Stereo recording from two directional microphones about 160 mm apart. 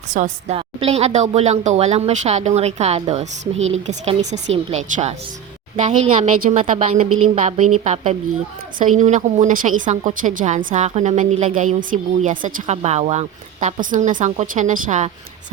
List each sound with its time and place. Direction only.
0.1 s a woman's voice: 50° right (ahead or behind)